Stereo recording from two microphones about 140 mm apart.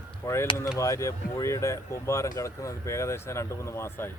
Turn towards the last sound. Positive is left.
turn(degrees=15)  # may be behind; listen again after turning